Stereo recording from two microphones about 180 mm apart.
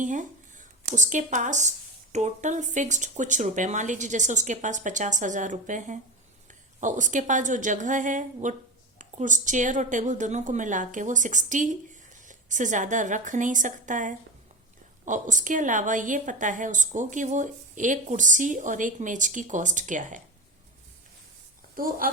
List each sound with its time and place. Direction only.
0.0 s a woman's voice: 45° right (ahead or behind)
21.8 s a woman's voice: 50° right (ahead or behind)